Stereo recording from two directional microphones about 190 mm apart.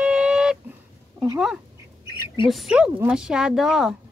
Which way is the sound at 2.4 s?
Centre (ahead or behind).